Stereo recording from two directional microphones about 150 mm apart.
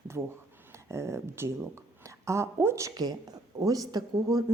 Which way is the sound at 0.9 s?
20° right (ahead or behind).